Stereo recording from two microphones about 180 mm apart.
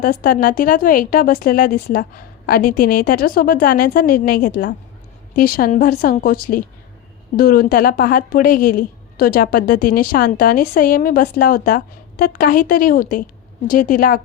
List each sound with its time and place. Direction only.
0.0 s speech: 50° left (ahead or behind)